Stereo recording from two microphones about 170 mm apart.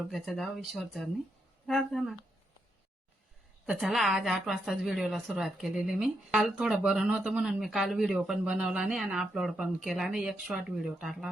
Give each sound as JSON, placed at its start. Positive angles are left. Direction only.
{"t": 0.1, "sound": "a woman's voice", "side_deg": 0}
{"t": 3.7, "sound": "a woman's voice", "side_deg": 0}